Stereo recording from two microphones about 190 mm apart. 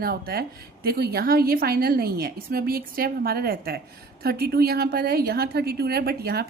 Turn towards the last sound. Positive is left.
turn(degrees=-55)  # may be behind; listen again after turning